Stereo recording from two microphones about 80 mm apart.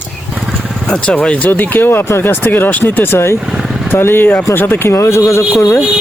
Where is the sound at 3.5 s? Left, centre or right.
Centre.